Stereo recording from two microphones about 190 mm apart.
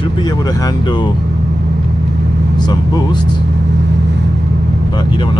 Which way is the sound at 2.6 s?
20° left (ahead or behind).